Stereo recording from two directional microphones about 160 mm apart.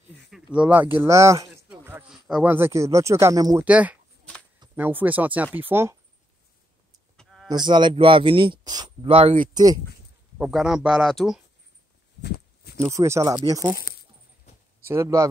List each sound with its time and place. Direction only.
0.3 s speech: 5° right (ahead or behind)
3.6 s speech: 10° right (ahead or behind)
7.2 s a sound: centre (ahead or behind)
7.4 s speech: 25° right (ahead or behind)
9.0 s speech: 40° right (ahead or behind)
9.5 s speech: 25° right (ahead or behind)
10.3 s speech: 5° right (ahead or behind)
12.2 s a sound: 90° left
12.8 s speech: 15° right (ahead or behind)
14.9 s speech: 20° right (ahead or behind)